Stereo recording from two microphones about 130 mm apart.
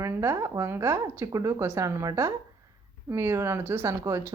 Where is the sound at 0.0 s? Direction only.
20° right (ahead or behind).